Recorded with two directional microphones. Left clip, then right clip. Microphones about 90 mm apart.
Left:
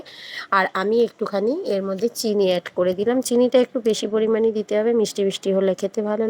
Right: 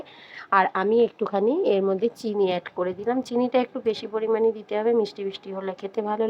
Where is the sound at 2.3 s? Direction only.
40° left (ahead or behind).